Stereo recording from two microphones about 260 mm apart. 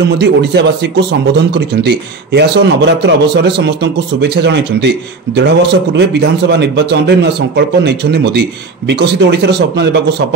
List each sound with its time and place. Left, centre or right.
0.2 s a man's voice: right